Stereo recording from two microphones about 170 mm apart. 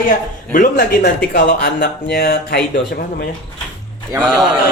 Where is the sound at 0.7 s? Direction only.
80° left.